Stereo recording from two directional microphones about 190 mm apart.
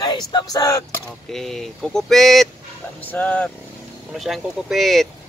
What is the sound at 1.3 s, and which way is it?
Speech, centre (ahead or behind).